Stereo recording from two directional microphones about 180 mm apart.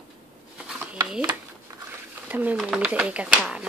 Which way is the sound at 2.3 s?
10° right (ahead or behind).